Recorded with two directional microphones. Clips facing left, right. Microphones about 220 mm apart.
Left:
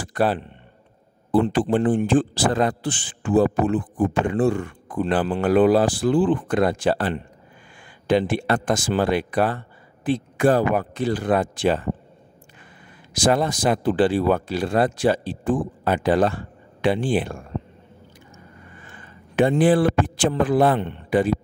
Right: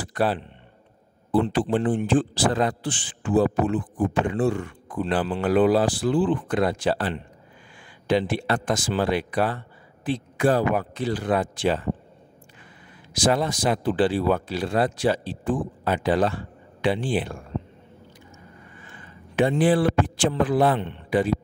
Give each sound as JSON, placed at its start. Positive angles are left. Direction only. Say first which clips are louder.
{"t": 0.0, "sound": "a sound", "louder": "left 2 dB", "side_deg": 50}
{"t": 1.3, "sound": "a man's voice", "louder": "left 3 dB", "side_deg": 50}
{"t": 13.1, "sound": "a man's voice", "louder": "left 2 dB", "side_deg": 50}
{"t": 19.3, "sound": "a man's voice", "louder": "left 3 dB", "side_deg": 50}